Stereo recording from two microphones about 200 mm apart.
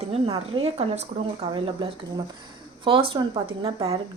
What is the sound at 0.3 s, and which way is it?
A woman's voice, 25° right (ahead or behind).